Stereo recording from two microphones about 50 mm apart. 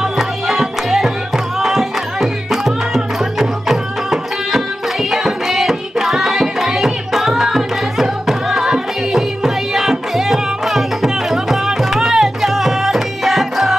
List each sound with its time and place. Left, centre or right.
0.0 s music: centre